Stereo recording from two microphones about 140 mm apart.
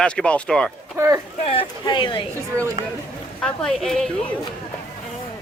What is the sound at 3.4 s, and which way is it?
Speech, 5° left (ahead or behind).